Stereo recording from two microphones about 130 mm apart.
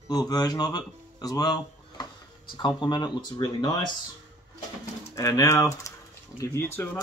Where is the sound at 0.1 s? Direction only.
30° left (ahead or behind).